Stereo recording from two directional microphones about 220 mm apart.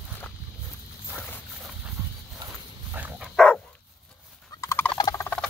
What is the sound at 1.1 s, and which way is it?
Horse, 10° left (ahead or behind).